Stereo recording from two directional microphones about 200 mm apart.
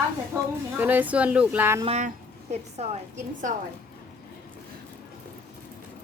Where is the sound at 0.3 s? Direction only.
15° right (ahead or behind).